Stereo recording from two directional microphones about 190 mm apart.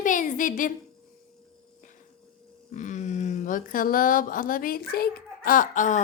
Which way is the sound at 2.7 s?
40° left (ahead or behind).